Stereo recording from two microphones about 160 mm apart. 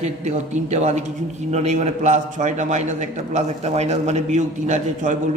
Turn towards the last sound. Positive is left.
turn(degrees=-50)  # may be behind; listen again after turning